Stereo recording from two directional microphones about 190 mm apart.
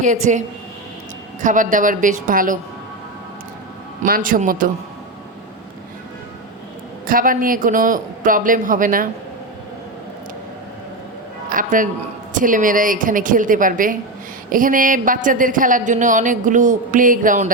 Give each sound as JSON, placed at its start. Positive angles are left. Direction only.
{"t": 0.0, "sound": "a woman's voice", "side_deg": -40}
{"t": 4.0, "sound": "a man's voice", "side_deg": -45}
{"t": 7.1, "sound": "a man's voice", "side_deg": -45}
{"t": 11.4, "sound": "a man's voice", "side_deg": -45}